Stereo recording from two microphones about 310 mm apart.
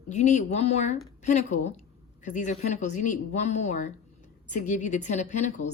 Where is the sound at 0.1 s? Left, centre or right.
Left.